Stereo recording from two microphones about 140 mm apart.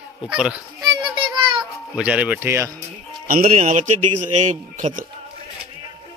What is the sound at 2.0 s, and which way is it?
Speech, 10° right (ahead or behind).